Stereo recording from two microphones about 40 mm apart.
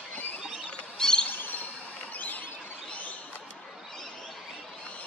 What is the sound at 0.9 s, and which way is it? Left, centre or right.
Bird, centre.